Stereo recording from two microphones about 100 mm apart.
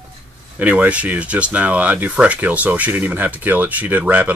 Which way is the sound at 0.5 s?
15° right (ahead or behind).